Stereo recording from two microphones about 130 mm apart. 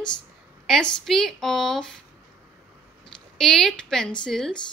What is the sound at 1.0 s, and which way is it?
Speech, 5° left (ahead or behind).